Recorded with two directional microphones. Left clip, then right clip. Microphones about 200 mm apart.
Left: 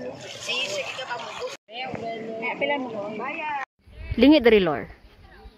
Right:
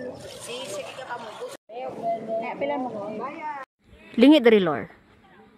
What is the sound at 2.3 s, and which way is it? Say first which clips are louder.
Speech: left 1 dB; 10° right (ahead or behind).